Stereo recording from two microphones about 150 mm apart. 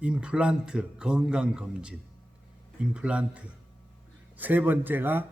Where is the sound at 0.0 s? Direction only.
5° right (ahead or behind).